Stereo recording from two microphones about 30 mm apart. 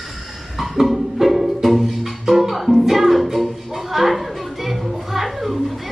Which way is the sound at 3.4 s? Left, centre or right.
Centre.